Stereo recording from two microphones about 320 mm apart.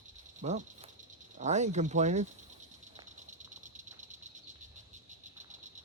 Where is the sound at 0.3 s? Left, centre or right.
Right.